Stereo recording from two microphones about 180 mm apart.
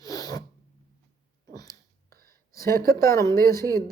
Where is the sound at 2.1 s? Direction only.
55° right (ahead or behind).